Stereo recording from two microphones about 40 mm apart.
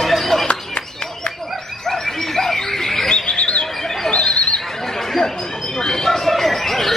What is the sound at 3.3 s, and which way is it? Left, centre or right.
Bird, left.